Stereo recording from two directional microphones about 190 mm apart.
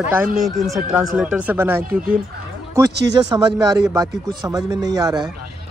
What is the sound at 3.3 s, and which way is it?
Speech, 20° right (ahead or behind).